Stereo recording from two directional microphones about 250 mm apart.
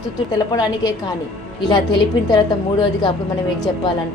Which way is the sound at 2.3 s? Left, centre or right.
Centre.